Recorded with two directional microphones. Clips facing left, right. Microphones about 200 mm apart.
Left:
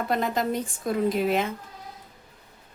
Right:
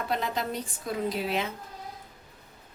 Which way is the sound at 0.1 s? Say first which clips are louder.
Left 5 dB; 50° left (ahead or behind).